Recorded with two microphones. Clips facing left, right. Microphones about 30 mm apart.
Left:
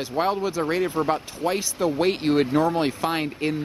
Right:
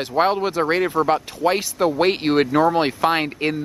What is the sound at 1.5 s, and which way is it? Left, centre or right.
Speech, right.